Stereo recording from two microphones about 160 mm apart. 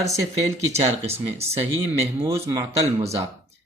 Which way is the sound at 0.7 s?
40° right (ahead or behind).